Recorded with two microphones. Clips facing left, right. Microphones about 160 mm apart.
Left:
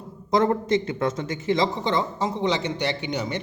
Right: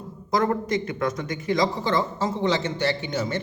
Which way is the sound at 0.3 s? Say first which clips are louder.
Left 3 dB; 25° left (ahead or behind).